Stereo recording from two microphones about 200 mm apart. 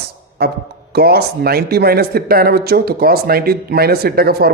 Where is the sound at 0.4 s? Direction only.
50° right (ahead or behind).